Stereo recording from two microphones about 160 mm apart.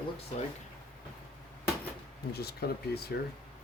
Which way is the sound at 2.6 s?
85° left.